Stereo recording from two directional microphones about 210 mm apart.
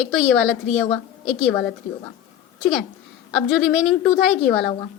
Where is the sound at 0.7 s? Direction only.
30° left (ahead or behind).